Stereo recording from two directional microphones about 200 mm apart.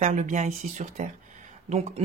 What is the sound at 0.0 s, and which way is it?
Speech, 35° right (ahead or behind).